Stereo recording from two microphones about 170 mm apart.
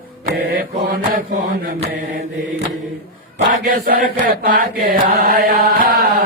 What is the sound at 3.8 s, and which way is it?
Mantra, 60° right (ahead or behind).